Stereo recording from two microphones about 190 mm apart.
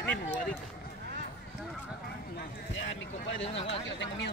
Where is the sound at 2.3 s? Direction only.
75° left (ahead or behind).